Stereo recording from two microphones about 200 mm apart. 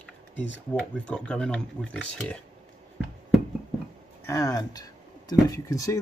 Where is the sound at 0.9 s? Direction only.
5° left (ahead or behind).